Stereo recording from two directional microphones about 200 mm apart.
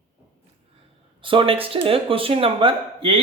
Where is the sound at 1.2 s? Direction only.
25° right (ahead or behind).